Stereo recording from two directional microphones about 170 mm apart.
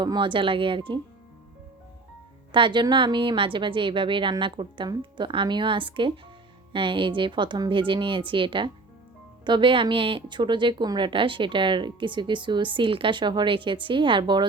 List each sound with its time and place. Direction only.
0.0 s speech: 25° right (ahead or behind)
2.5 s speech: 30° right (ahead or behind)